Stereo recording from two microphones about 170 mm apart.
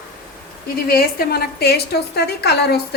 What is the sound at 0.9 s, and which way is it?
A woman's voice, 60° left (ahead or behind).